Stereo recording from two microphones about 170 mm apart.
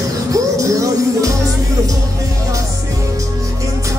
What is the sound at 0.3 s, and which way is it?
Music, 20° right (ahead or behind).